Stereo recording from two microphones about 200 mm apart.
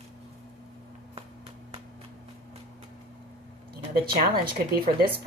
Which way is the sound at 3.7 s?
50° right (ahead or behind).